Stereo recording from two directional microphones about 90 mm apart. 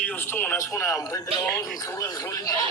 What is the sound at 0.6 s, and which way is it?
Speech, 35° left (ahead or behind).